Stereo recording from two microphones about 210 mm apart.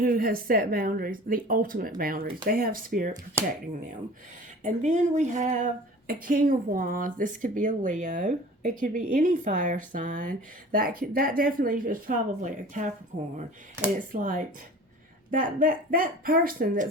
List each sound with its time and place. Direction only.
0.0 s speech: 40° right (ahead or behind)
4.6 s speech: 35° right (ahead or behind)
14.1 s speech: 40° right (ahead or behind)